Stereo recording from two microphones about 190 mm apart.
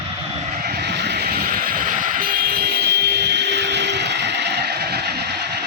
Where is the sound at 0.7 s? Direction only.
60° right (ahead or behind).